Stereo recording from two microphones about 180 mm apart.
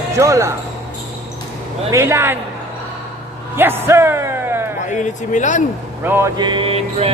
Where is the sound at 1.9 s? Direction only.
15° right (ahead or behind).